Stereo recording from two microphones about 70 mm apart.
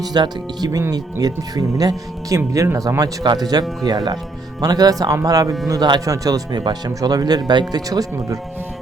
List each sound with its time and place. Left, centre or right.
0.0 s speech: right
0.8 s speech: right
3.0 s speech: right
5.8 s speech: right